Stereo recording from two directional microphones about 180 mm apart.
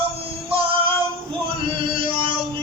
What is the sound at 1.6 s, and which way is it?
Music, 30° right (ahead or behind).